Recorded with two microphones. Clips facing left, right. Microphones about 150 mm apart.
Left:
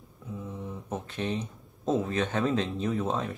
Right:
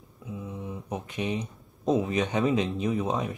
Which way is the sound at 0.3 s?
10° right (ahead or behind).